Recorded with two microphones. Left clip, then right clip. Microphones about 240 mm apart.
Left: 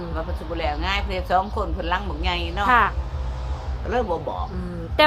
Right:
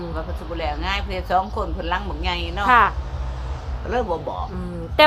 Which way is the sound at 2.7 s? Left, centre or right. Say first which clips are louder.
Right 3 dB; centre.